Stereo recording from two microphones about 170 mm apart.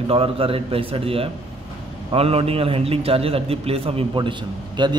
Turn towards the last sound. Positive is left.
turn(degrees=-25)  # may be behind; listen again after turning